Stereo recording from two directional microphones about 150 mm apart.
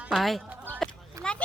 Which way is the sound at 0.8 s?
5° left (ahead or behind).